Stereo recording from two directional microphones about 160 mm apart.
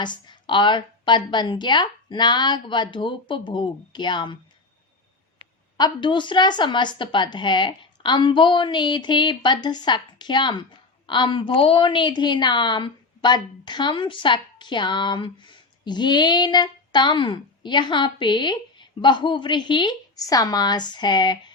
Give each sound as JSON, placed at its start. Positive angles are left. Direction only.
{"t": 0.0, "sound": "speech", "side_deg": 30}
{"t": 5.7, "sound": "speech", "side_deg": 30}